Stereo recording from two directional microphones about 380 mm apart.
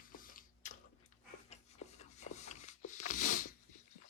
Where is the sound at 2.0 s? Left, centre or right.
Centre.